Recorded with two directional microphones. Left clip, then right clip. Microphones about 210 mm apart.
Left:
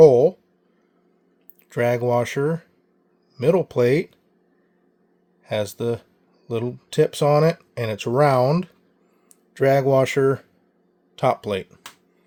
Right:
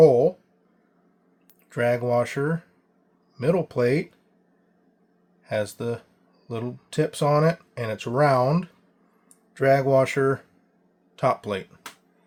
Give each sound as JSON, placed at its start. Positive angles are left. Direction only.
{"t": 0.0, "sound": "speech", "side_deg": 25}
{"t": 1.7, "sound": "speech", "side_deg": 25}
{"t": 5.4, "sound": "speech", "side_deg": 25}